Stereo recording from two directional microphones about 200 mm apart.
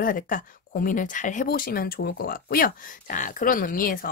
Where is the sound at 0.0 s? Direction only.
40° left (ahead or behind).